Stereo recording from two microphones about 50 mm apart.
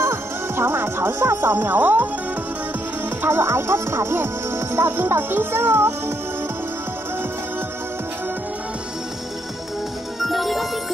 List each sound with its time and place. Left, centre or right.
0.0 s speech: right
3.3 s speech: right
10.2 s music: centre